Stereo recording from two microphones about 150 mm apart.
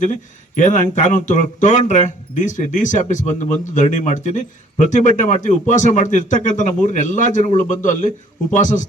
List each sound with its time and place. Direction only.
0.0 s speech: 55° left (ahead or behind)